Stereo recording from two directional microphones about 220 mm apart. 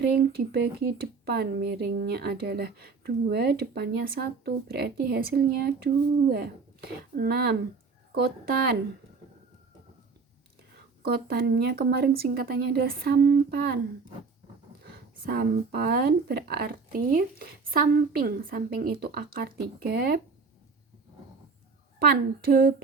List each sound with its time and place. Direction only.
0.0 s speech: 45° right (ahead or behind)
11.0 s speech: 45° right (ahead or behind)
14.8 s speech: 45° right (ahead or behind)
21.9 s speech: 45° right (ahead or behind)